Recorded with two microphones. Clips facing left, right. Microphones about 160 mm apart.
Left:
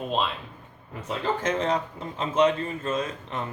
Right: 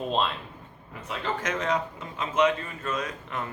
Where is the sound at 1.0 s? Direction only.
30° left (ahead or behind).